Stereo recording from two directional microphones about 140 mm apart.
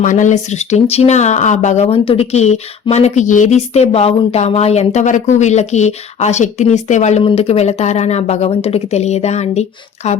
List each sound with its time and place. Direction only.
0.0 s speech: 65° left (ahead or behind)